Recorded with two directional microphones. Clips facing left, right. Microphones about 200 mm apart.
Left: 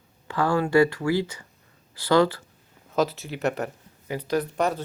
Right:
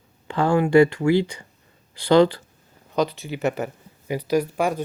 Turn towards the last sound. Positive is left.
turn(degrees=-10)  # may be behind; listen again after turning